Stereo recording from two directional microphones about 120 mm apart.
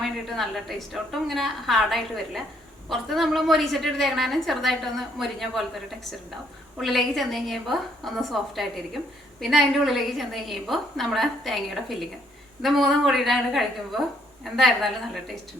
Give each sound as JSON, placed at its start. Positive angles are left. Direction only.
{"t": 0.3, "sound": "a woman's voice", "side_deg": 0}
{"t": 6.7, "sound": "a woman's voice", "side_deg": 0}